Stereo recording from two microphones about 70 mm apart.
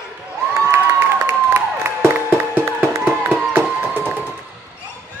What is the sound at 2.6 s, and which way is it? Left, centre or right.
Music, right.